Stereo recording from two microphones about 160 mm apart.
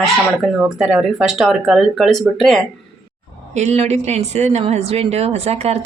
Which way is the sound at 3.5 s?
45° right (ahead or behind).